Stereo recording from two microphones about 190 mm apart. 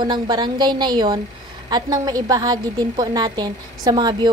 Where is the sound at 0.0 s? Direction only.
20° right (ahead or behind).